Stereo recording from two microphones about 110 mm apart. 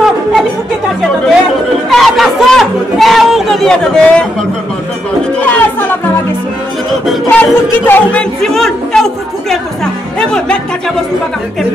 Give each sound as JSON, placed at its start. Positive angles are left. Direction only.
{"t": 1.9, "sound": "chatter", "side_deg": 0}
{"t": 5.5, "sound": "music", "side_deg": 15}
{"t": 7.2, "sound": "a man's voice", "side_deg": 15}